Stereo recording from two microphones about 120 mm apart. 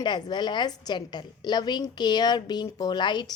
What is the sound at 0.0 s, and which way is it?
A woman's voice, 40° left (ahead or behind).